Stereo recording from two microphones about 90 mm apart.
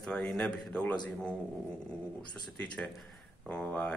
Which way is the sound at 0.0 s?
10° left (ahead or behind).